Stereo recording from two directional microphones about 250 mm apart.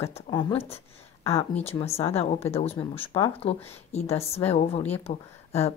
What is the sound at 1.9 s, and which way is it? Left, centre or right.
Speech, left.